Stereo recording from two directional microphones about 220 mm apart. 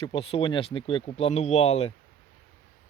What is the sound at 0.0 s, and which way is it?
Speech, 25° left (ahead or behind).